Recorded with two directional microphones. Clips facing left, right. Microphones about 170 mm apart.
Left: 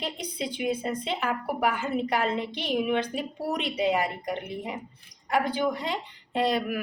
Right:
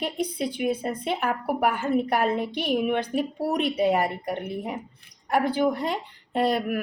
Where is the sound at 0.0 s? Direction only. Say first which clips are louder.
Right 5 dB; 55° right (ahead or behind).